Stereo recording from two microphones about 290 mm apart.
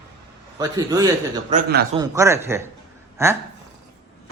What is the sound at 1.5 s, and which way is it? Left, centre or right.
Speech, right.